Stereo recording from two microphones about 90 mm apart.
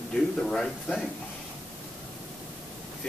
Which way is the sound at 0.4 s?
5° left (ahead or behind).